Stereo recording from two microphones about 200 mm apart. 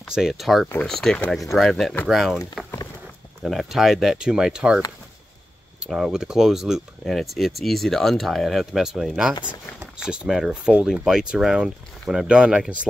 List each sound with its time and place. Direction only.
0.1 s speech: centre (ahead or behind)